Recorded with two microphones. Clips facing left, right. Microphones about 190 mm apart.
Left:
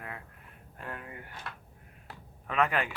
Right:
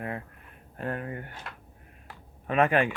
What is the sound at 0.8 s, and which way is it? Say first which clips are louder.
Speech: right 9 dB; 50° right (ahead or behind).